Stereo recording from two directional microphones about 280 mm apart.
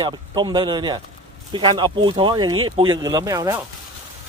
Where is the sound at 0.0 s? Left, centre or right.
Centre.